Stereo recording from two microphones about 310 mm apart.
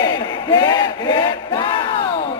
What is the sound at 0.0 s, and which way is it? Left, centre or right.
Crowd, centre.